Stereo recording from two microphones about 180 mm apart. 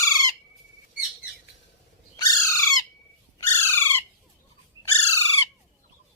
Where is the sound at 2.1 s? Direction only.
15° left (ahead or behind).